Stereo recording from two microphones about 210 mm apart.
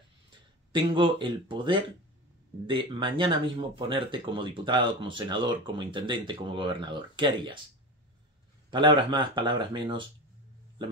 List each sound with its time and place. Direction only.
0.7 s speech: 25° right (ahead or behind)
8.6 s speech: 20° right (ahead or behind)